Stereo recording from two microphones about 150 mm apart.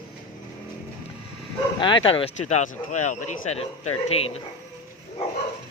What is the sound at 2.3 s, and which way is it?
Speech, 50° left (ahead or behind).